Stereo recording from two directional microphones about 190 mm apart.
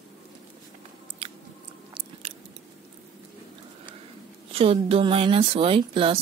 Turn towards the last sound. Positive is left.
turn(degrees=-25)  # may be behind; listen again after turning